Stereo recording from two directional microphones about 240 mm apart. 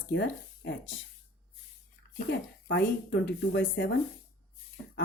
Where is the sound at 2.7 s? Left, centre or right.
Left.